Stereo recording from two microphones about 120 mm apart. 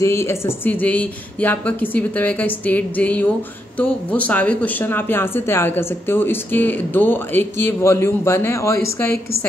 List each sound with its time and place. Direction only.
0.0 s speech: 20° left (ahead or behind)